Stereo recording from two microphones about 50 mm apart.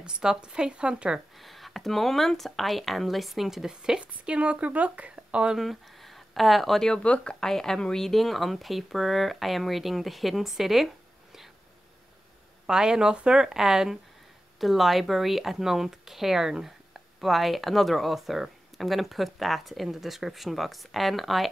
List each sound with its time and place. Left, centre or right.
0.0 s speech: centre
1.3 s speech: centre
5.6 s speech: centre
6.9 s speech: left
7.4 s speech: centre
12.6 s speech: centre